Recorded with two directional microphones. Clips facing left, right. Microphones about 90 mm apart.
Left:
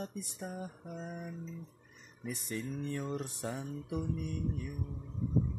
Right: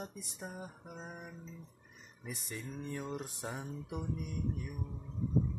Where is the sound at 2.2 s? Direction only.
10° right (ahead or behind).